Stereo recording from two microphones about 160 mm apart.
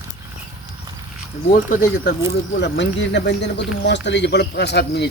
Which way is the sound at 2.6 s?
90° left.